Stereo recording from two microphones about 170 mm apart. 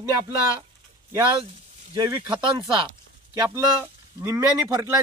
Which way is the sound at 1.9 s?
25° right (ahead or behind).